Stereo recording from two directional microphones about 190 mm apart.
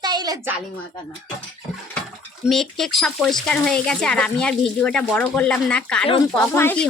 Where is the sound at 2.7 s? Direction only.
Centre (ahead or behind).